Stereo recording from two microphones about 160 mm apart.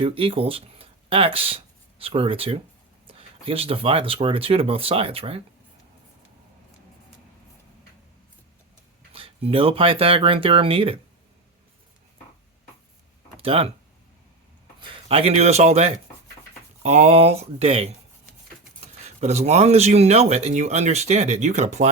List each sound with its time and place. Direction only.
0.0 s speech: 35° right (ahead or behind)
9.1 s speech: 35° right (ahead or behind)
13.3 s speech: 35° right (ahead or behind)
14.8 s speech: 35° right (ahead or behind)